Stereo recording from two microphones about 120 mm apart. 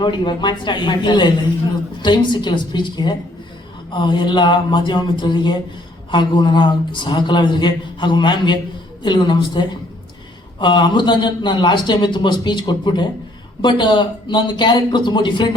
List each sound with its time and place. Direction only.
0.0 s a man's voice: 40° left (ahead or behind)